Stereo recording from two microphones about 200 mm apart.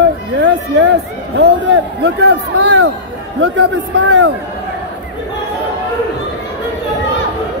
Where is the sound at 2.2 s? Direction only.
60° right (ahead or behind).